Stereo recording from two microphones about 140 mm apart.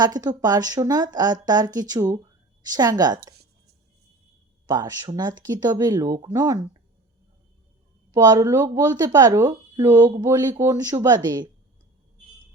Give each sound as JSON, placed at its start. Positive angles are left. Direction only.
{"t": 0.0, "sound": "speech", "side_deg": -30}
{"t": 4.7, "sound": "speech", "side_deg": -30}
{"t": 8.1, "sound": "speech", "side_deg": -30}